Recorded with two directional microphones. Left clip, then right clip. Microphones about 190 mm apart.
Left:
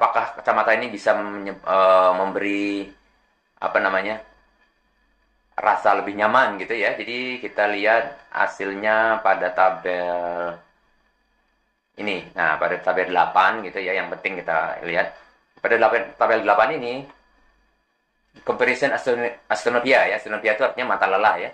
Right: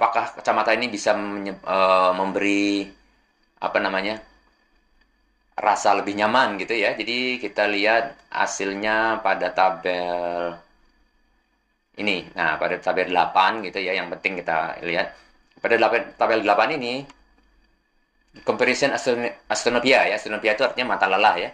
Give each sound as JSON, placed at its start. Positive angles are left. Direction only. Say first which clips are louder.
{"t": 0.0, "sound": "speech", "louder": "left 1 dB", "side_deg": -35}
{"t": 5.5, "sound": "speech", "louder": "left 1 dB", "side_deg": -35}
{"t": 11.9, "sound": "speech", "louder": "right 2 dB", "side_deg": -35}
{"t": 18.4, "sound": "speech", "louder": "even", "side_deg": -35}